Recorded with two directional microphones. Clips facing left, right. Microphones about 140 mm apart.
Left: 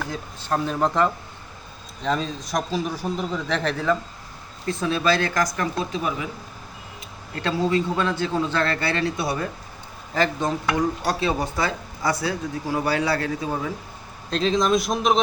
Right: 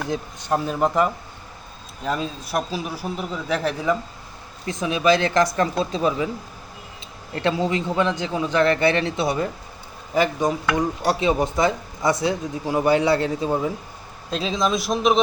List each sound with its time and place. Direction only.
0.0 s a man's voice: 15° right (ahead or behind)
7.4 s a man's voice: 20° right (ahead or behind)
14.3 s a man's voice: 5° right (ahead or behind)